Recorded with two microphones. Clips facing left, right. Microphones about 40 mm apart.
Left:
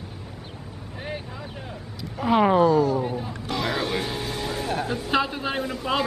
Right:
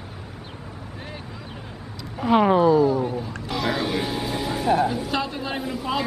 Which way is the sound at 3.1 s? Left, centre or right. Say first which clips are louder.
Right 1 dB; centre.